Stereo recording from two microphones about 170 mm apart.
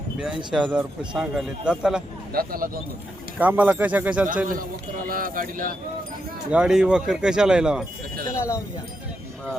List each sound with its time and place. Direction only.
0.5 s speech: 5° right (ahead or behind)
2.3 s a man's voice: 60° right (ahead or behind)
3.3 s speech: 10° right (ahead or behind)
4.4 s a man's voice: 55° right (ahead or behind)
6.5 s speech: 5° right (ahead or behind)
8.4 s speech: 15° left (ahead or behind)